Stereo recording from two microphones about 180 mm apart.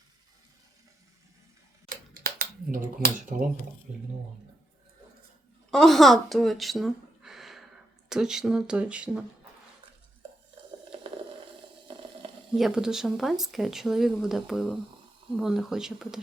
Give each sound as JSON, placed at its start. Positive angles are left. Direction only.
{"t": 1.9, "sound": "a sound", "side_deg": -55}
{"t": 5.7, "sound": "speech", "side_deg": 0}
{"t": 11.9, "sound": "boiling", "side_deg": -30}
{"t": 12.5, "sound": "speech", "side_deg": 0}